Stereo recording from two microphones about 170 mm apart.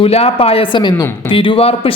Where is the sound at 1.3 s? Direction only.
30° left (ahead or behind).